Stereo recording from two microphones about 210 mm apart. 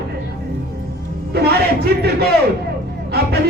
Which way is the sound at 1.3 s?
50° right (ahead or behind).